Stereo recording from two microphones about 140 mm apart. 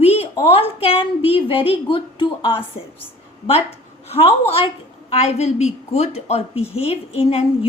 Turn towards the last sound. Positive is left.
turn(degrees=45)  # may be behind; listen again after turning